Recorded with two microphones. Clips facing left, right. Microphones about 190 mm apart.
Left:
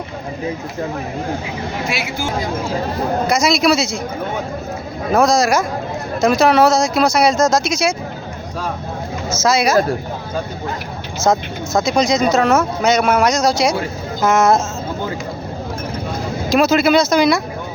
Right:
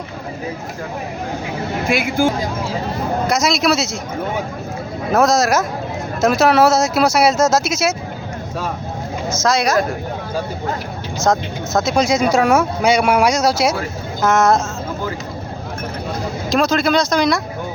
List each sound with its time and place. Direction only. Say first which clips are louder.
1.9 s speech: right 11 dB; 50° right (ahead or behind)
3.2 s speech: left 2 dB; centre (ahead or behind)
5.1 s speech: left 1 dB; centre (ahead or behind)
9.4 s speech: left 2 dB; centre (ahead or behind)
11.2 s speech: left 1 dB; centre (ahead or behind)
16.5 s speech: left 3 dB; 5° left (ahead or behind)